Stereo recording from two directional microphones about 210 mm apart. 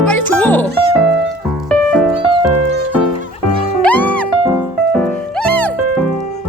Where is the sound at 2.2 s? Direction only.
25° right (ahead or behind).